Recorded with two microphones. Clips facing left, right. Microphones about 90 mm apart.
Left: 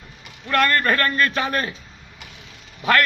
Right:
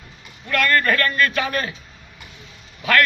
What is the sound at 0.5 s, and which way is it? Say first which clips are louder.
A man's voice: even; 30° left (ahead or behind).